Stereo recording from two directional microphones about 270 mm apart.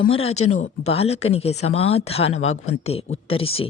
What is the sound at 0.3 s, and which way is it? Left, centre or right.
Speech, left.